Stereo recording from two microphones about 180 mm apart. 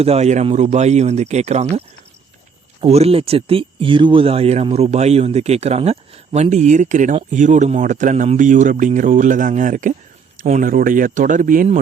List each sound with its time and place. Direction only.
0.0 s speech: 35° right (ahead or behind)
2.8 s speech: 35° right (ahead or behind)